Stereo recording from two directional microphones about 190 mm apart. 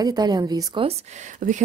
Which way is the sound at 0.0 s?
20° right (ahead or behind).